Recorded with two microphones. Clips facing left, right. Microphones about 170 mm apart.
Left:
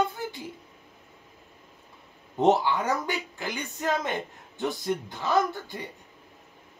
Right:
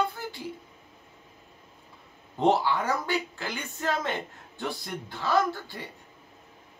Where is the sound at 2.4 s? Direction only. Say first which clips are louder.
Left 2 dB; 20° left (ahead or behind).